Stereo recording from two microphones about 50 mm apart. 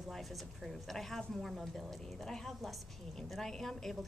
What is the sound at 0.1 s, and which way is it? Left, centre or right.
A woman's voice, centre.